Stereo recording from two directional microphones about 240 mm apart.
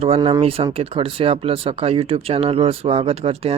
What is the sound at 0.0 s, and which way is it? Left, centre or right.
Speech, right.